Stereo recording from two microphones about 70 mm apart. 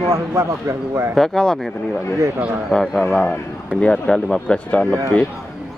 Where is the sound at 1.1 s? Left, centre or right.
Centre.